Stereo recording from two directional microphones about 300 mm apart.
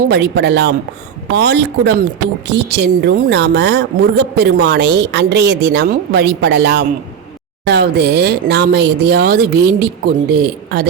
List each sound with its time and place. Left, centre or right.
0.1 s a woman's voice: right